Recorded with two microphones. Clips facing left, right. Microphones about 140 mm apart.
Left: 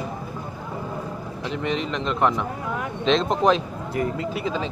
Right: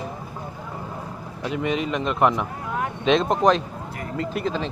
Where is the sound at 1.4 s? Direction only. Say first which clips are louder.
Right 2 dB; 5° right (ahead or behind).